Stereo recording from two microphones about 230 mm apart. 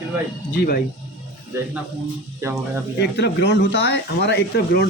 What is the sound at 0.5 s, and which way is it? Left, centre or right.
Speech, left.